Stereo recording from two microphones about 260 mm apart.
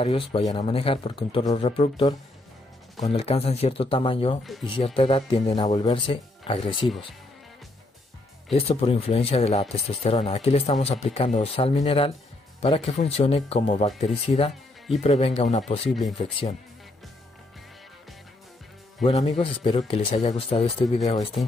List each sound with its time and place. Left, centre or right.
0.0 s speech: left
8.5 s speech: left
19.0 s speech: left